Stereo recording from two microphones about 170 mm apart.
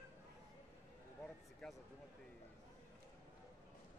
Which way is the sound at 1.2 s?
5° left (ahead or behind).